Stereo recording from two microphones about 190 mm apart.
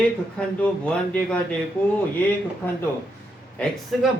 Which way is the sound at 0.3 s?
5° left (ahead or behind).